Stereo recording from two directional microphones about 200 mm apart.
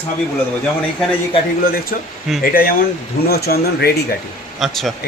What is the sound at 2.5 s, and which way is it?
Speech, 45° left (ahead or behind).